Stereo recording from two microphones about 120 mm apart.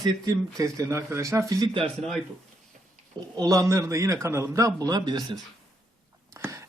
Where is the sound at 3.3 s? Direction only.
30° right (ahead or behind).